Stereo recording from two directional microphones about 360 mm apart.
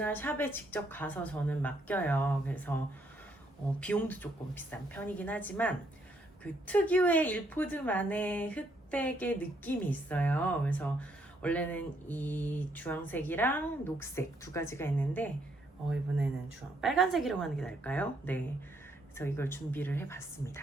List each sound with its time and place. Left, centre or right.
0.0 s a woman's voice: centre
3.8 s a woman's voice: centre
16.8 s a woman's voice: centre